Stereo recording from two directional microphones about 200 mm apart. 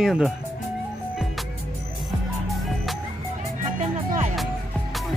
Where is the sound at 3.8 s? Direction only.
35° right (ahead or behind).